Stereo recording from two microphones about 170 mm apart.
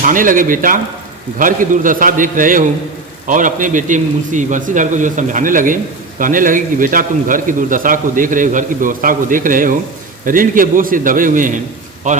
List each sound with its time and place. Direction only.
0.0 s a man's voice: 50° right (ahead or behind)